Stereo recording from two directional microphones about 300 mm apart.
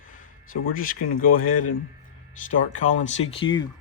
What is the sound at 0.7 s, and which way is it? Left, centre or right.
Speech, left.